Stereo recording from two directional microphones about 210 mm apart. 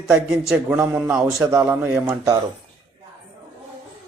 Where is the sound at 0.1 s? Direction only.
5° right (ahead or behind).